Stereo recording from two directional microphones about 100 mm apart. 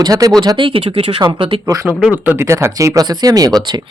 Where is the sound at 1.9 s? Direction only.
15° right (ahead or behind).